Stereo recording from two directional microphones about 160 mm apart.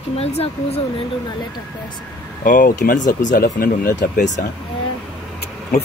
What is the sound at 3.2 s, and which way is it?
Speech, 65° left (ahead or behind).